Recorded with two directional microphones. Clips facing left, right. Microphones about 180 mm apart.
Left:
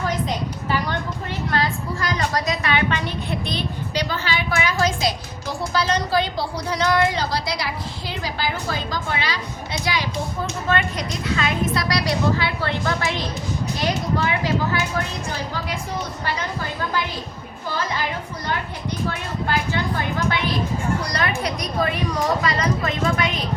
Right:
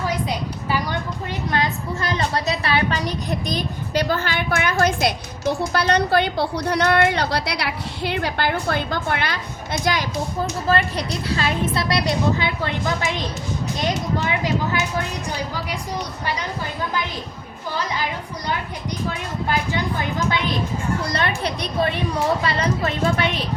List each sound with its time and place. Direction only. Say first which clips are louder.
0.3 s a sound: even; 10° right (ahead or behind)
1.5 s a woman's voice: even; 25° right (ahead or behind); by 10.1 s 50° right (ahead or behind)
10.7 s a woman's voice: right 2 dB; 35° right (ahead or behind); by 14.8 s 20° right (ahead or behind)
21.0 s a woman's voice: right 1 dB; 25° right (ahead or behind)